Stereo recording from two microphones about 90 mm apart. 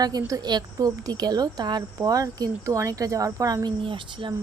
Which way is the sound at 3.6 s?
70° right (ahead or behind).